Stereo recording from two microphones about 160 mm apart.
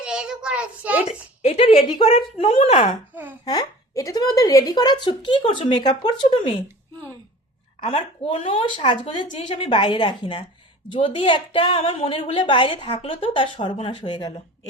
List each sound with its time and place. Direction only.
0.0 s a child's voice: 5° right (ahead or behind)
1.0 s speech: 40° left (ahead or behind)
3.4 s speech: 25° left (ahead or behind)
7.8 s a woman's voice: 35° left (ahead or behind)